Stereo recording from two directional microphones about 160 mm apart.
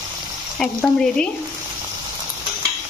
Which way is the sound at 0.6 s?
5° left (ahead or behind).